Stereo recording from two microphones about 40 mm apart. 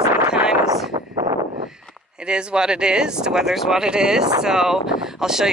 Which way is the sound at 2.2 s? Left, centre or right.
Right.